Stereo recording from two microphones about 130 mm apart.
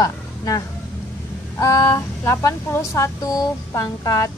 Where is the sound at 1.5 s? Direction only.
25° left (ahead or behind).